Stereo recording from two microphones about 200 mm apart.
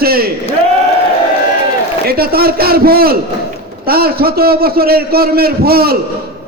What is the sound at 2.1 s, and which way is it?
A man's voice, 50° right (ahead or behind).